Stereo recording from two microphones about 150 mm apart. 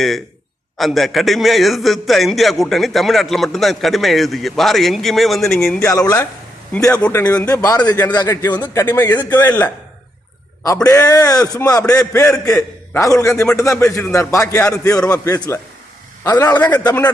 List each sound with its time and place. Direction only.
0.8 s a man's voice: centre (ahead or behind)
5.8 s a man's voice: 20° left (ahead or behind)
6.9 s a man's voice: 10° left (ahead or behind)
7.4 s a man's voice: 25° left (ahead or behind)
10.8 s a man's voice: 20° left (ahead or behind)